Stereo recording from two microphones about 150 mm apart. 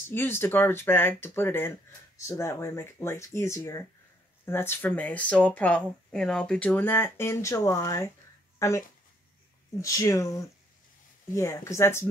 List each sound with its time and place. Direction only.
0.1 s speech: 15° left (ahead or behind)